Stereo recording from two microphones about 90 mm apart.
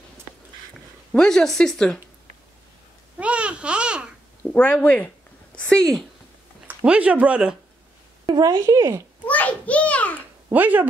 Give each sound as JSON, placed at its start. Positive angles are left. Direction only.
{"t": 1.1, "sound": "speech", "side_deg": 5}
{"t": 3.2, "sound": "babbling", "side_deg": -10}
{"t": 4.5, "sound": "speech", "side_deg": 15}
{"t": 6.7, "sound": "speech", "side_deg": -15}
{"t": 8.3, "sound": "speech", "side_deg": -45}
{"t": 9.2, "sound": "a sound", "side_deg": 15}
{"t": 10.5, "sound": "speech", "side_deg": -20}